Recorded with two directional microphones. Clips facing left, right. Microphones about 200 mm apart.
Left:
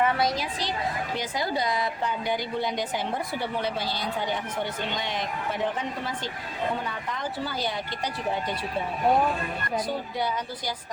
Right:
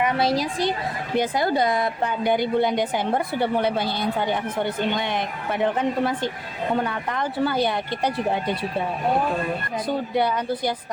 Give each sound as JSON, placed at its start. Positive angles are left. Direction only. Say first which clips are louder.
{"t": 0.2, "sound": "a woman's voice", "louder": "right 5 dB", "side_deg": -30}
{"t": 1.1, "sound": "speech", "louder": "right 12 dB", "side_deg": -55}
{"t": 10.2, "sound": "speech", "louder": "right 8 dB", "side_deg": -60}